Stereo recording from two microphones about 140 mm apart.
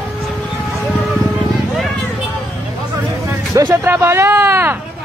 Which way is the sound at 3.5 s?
20° right (ahead or behind).